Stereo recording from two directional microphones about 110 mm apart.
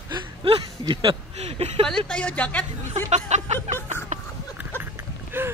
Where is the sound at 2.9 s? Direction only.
90° right.